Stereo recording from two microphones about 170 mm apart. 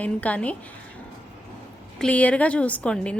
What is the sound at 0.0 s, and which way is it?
Speech, 10° left (ahead or behind).